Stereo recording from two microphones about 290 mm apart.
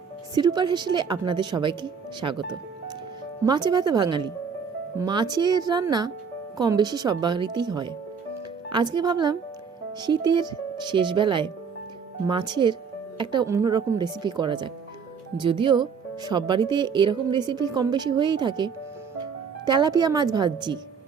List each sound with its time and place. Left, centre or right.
0.3 s speech: centre